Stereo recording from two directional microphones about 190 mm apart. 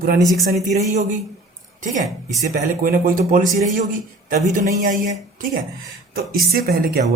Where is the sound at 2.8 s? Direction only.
45° right (ahead or behind).